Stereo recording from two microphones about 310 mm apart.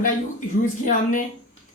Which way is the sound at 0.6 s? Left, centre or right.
Left.